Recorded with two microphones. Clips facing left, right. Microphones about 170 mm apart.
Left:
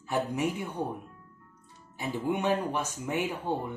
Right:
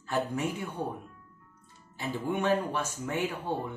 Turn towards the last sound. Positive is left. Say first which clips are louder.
# left 1 dB
turn(degrees=15)  # may be behind; listen again after turning